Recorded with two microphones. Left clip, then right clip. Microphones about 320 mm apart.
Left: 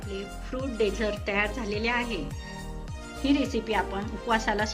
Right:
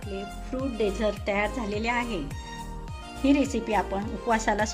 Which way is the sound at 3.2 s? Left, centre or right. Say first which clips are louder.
Right 2 dB; centre.